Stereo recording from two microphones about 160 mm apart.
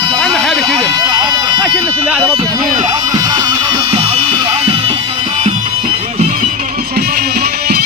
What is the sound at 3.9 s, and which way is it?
Music, 35° right (ahead or behind).